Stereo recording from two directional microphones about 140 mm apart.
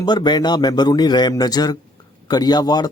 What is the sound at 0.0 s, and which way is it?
Speech, 30° left (ahead or behind).